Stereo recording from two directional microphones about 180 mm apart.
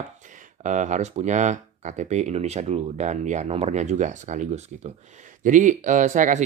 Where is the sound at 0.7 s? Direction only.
45° right (ahead or behind).